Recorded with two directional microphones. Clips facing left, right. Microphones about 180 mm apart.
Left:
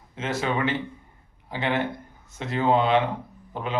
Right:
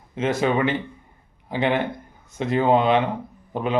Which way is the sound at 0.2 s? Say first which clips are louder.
Right 5 dB; 15° right (ahead or behind).